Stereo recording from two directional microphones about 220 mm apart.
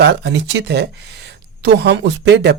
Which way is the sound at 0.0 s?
55° right (ahead or behind).